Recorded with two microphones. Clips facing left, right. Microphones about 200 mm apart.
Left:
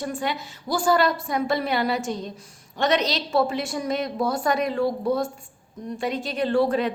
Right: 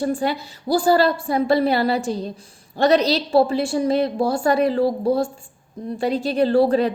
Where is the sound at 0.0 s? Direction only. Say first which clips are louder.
Right 6 dB; 35° right (ahead or behind).